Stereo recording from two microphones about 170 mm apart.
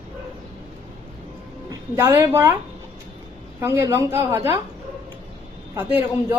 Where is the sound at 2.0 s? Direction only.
20° right (ahead or behind).